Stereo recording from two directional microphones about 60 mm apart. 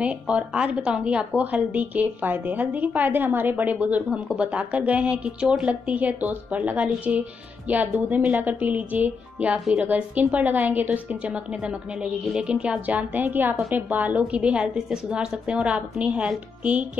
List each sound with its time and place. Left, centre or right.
0.0 s a woman's voice: right
11.6 s a woman's voice: centre